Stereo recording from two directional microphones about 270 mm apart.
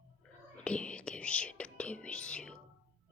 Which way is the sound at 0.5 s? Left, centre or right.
Centre.